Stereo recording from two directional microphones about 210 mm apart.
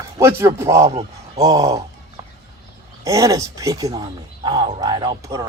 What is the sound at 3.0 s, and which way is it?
Speech, 15° right (ahead or behind).